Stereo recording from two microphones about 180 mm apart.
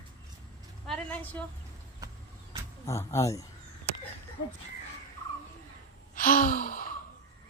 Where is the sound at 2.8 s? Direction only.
15° left (ahead or behind).